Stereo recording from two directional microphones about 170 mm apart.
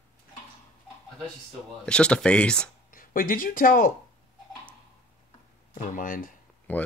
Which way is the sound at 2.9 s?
55° left (ahead or behind).